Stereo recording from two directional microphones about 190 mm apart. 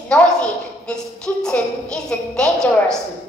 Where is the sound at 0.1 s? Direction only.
5° left (ahead or behind).